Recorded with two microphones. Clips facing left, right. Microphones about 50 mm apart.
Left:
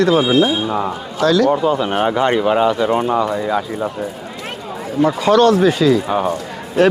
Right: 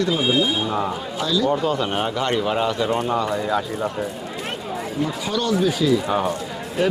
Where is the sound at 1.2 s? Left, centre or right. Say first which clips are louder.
Left 8 dB; left.